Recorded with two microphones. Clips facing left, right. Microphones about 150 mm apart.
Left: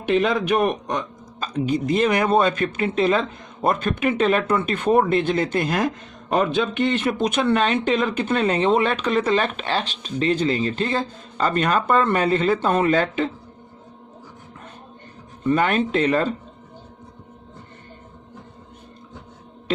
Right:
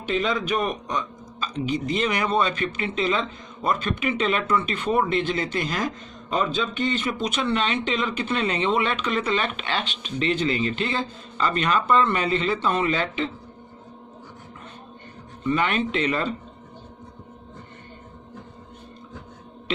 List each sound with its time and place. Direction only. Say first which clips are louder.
0.0 s a man's voice: left 5 dB; 60° left (ahead or behind)
15.4 s a man's voice: left 4 dB; 45° left (ahead or behind)